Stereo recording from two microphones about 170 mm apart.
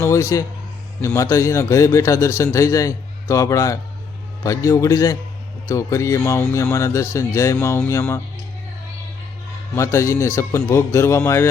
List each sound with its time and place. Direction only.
0.0 s a man's voice: 15° left (ahead or behind)
9.7 s a man's voice: 15° left (ahead or behind)